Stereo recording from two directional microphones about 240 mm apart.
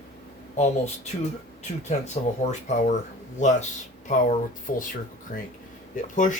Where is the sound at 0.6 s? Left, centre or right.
Left.